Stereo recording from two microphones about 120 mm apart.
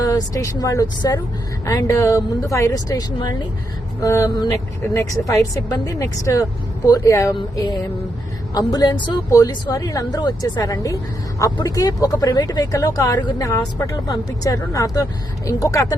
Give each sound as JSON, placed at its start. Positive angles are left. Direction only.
{"t": 0.0, "sound": "speech", "side_deg": 30}
{"t": 8.5, "sound": "a woman's voice", "side_deg": 30}